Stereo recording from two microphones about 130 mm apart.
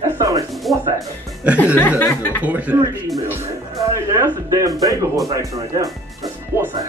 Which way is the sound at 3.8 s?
25° right (ahead or behind).